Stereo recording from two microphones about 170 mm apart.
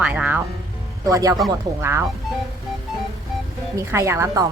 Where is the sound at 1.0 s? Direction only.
20° right (ahead or behind).